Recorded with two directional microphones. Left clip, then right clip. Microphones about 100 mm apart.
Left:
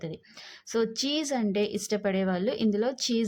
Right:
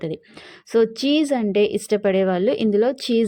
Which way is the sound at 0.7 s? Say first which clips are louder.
Right 10 dB; 35° right (ahead or behind).